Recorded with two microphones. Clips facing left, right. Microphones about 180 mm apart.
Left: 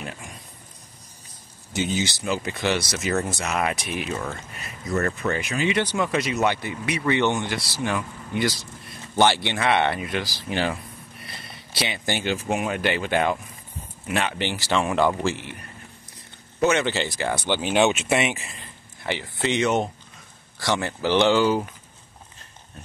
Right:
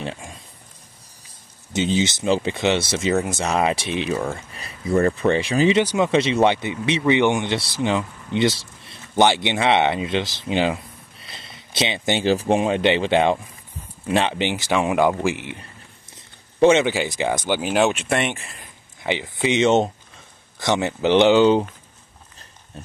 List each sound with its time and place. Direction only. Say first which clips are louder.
0.0 s a sound: right 5 dB; 25° right (ahead or behind)
1.7 s speech: right 5 dB; 25° right (ahead or behind)
3.4 s speech: right 5 dB; 30° right (ahead or behind)
5.8 s speech: right 5 dB; 20° right (ahead or behind)
14.4 s speech: right 3 dB; 15° right (ahead or behind)
16.5 s speech: right 6 dB; 30° right (ahead or behind)
16.8 s speech: right 3 dB; 10° right (ahead or behind)
17.5 s speech: even; 5° right (ahead or behind)
18.6 s speech: right 1 dB; 15° right (ahead or behind)